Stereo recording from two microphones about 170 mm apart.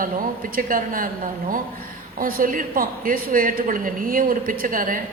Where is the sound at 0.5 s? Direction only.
55° right (ahead or behind).